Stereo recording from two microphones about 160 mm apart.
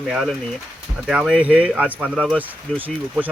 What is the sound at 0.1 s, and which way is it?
Speech, centre (ahead or behind).